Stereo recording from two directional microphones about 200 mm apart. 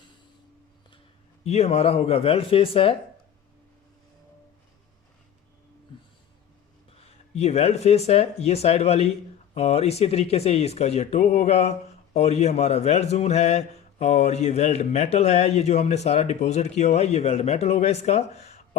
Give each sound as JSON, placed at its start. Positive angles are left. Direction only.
{"t": 1.5, "sound": "speech", "side_deg": 30}
{"t": 7.0, "sound": "a man's voice", "side_deg": 30}